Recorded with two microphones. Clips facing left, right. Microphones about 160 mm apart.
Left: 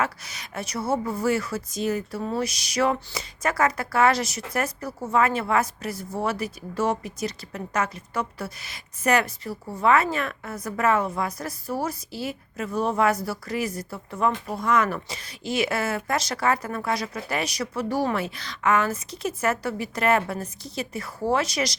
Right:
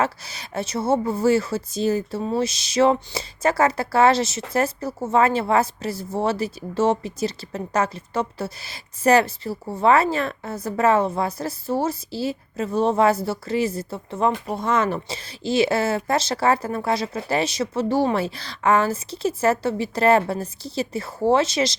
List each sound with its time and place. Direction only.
0.0 s speech: 30° right (ahead or behind)